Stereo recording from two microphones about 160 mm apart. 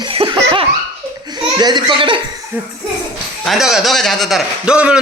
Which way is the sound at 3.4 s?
Centre (ahead or behind).